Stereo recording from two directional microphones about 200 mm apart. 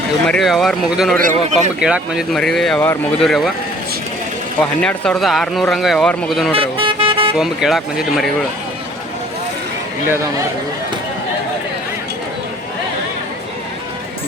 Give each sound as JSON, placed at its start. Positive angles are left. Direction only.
{"t": 0.3, "sound": "speech", "side_deg": 0}
{"t": 1.2, "sound": "a man's voice", "side_deg": -35}
{"t": 1.8, "sound": "speech", "side_deg": -5}
{"t": 4.6, "sound": "speech", "side_deg": 5}
{"t": 6.5, "sound": "vehicle", "side_deg": -25}
{"t": 7.3, "sound": "speech", "side_deg": 0}